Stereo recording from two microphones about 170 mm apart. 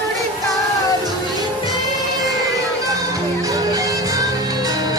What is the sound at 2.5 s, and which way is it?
Music, 20° right (ahead or behind).